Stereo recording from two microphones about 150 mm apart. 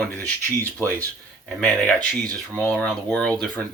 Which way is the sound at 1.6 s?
5° left (ahead or behind).